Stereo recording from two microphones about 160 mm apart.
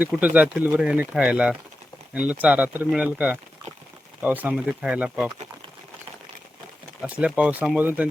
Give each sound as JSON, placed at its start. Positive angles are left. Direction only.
{"t": 0.0, "sound": "speech", "side_deg": -10}
{"t": 7.0, "sound": "speech", "side_deg": -5}